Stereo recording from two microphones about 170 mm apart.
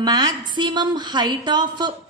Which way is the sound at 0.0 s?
25° right (ahead or behind).